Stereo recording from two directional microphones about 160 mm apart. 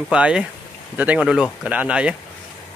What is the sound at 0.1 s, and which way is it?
Speech, 5° right (ahead or behind).